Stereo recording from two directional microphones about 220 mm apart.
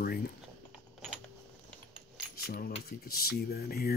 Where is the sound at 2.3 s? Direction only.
45° left (ahead or behind).